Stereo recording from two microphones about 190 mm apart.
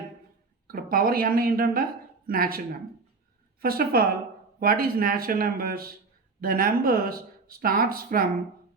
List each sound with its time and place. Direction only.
0.7 s a woman's voice: 50° right (ahead or behind)
3.6 s speech: 50° right (ahead or behind)